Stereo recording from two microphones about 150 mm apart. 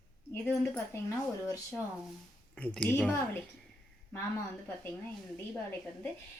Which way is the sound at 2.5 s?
10° left (ahead or behind).